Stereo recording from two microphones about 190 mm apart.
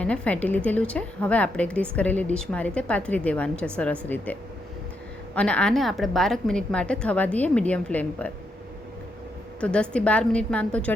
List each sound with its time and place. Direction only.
0.0 s a woman's voice: 5° left (ahead or behind)
5.3 s a woman's voice: 5° left (ahead or behind)
9.6 s a woman's voice: 5° left (ahead or behind)